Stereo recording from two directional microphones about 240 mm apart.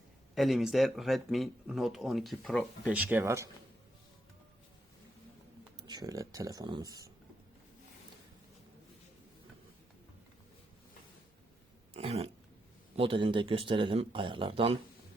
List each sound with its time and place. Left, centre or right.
0.3 s speech: centre
5.9 s speech: centre
11.9 s speech: right